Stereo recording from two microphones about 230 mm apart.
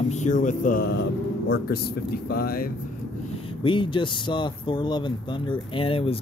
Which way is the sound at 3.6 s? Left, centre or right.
Left.